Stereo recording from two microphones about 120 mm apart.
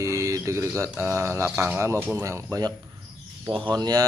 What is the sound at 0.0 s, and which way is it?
Bird, 25° right (ahead or behind).